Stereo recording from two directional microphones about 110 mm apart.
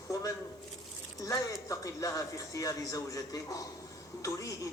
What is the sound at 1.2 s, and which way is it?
Speech, 30° left (ahead or behind).